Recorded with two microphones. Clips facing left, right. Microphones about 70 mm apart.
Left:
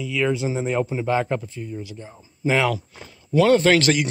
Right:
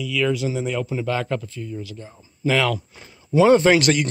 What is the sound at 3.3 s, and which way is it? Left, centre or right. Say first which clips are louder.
Speech: right 2 dB; centre.